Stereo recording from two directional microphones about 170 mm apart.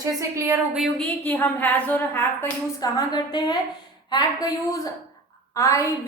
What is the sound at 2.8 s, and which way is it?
A woman's voice, 25° left (ahead or behind).